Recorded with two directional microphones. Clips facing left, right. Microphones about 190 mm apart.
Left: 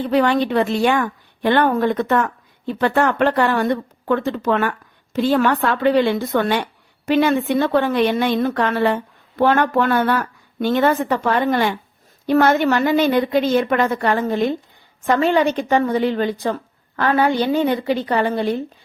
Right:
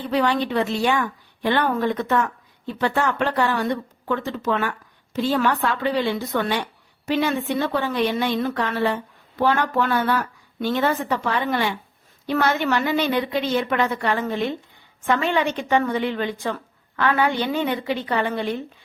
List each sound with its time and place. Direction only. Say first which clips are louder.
0.1 s a woman's voice: left 4 dB; 55° left (ahead or behind); by 18.6 s 35° left (ahead or behind)